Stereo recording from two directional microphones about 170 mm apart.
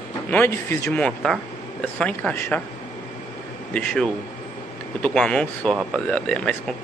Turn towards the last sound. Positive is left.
turn(degrees=5)  # may be behind; listen again after turning